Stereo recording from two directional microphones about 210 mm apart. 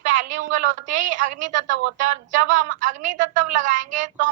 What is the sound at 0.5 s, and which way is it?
A woman's voice, 35° right (ahead or behind).